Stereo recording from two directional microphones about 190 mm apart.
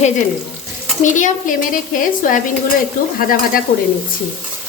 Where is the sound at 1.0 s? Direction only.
40° left (ahead or behind).